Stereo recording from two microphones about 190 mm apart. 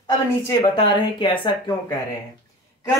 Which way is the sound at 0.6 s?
25° left (ahead or behind).